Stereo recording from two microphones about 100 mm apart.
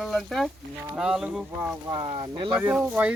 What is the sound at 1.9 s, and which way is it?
Speech, 45° right (ahead or behind).